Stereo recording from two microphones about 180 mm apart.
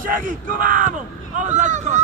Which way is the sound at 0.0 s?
50° right (ahead or behind).